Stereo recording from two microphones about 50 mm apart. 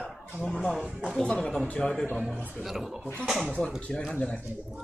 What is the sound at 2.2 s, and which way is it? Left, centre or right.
Speech, centre.